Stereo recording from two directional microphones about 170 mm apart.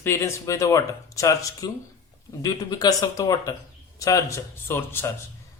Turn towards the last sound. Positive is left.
turn(degrees=15)  # may be behind; listen again after turning